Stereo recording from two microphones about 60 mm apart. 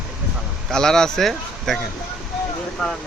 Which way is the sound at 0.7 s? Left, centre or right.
Centre.